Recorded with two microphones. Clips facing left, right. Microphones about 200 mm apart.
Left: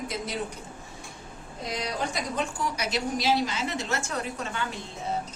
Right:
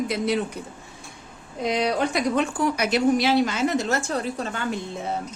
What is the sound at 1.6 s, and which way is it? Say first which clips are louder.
A woman's voice: right 8 dB; 65° right (ahead or behind).